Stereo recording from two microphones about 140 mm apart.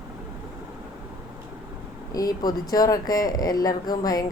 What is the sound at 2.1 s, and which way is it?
A woman's voice, 30° left (ahead or behind).